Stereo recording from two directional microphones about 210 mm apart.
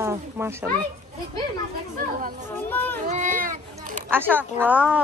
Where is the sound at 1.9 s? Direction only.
40° right (ahead or behind).